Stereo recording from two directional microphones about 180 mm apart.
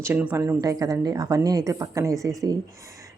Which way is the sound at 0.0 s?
10° right (ahead or behind).